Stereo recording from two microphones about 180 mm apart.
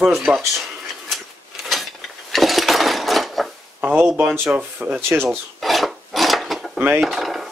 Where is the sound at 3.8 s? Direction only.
10° right (ahead or behind).